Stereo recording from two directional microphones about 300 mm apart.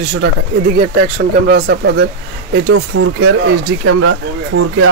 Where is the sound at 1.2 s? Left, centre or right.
Right.